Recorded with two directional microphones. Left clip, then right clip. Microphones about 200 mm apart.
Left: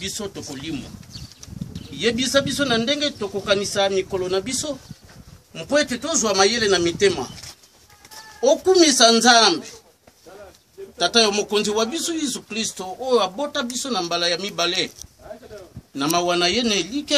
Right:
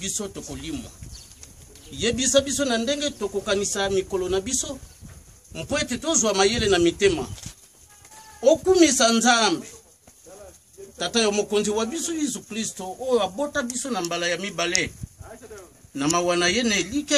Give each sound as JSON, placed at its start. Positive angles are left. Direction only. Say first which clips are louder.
{"t": 0.0, "sound": "a man's voice", "louder": "left 2 dB", "side_deg": -45}
{"t": 2.0, "sound": "a man's voice", "louder": "left 1 dB", "side_deg": -50}
{"t": 8.4, "sound": "a child's voice", "louder": "left 1 dB", "side_deg": -40}
{"t": 11.0, "sound": "a man's voice", "louder": "left 5 dB", "side_deg": -20}
{"t": 16.0, "sound": "a man's voice", "louder": "left 2 dB", "side_deg": -5}